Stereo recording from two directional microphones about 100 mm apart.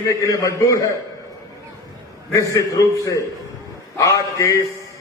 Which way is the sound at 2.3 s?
30° left (ahead or behind).